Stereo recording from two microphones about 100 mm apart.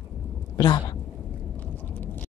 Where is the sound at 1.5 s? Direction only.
20° left (ahead or behind).